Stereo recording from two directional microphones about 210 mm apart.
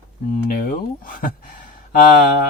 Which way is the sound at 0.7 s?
40° left (ahead or behind).